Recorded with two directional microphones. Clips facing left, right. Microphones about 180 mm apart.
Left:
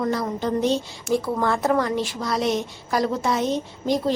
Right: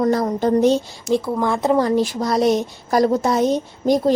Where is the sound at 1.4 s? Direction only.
15° right (ahead or behind).